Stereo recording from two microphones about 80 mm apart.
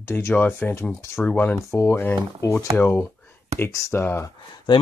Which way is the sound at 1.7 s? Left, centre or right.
Left.